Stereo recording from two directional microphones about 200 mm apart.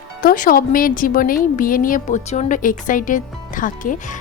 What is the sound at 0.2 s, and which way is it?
Speech, 40° left (ahead or behind).